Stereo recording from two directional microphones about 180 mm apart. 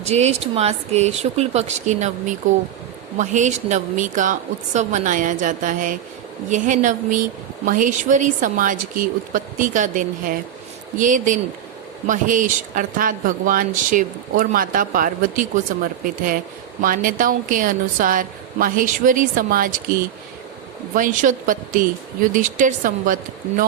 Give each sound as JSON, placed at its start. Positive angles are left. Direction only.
{"t": 0.0, "sound": "a woman's voice", "side_deg": -35}
{"t": 20.9, "sound": "a woman's voice", "side_deg": -45}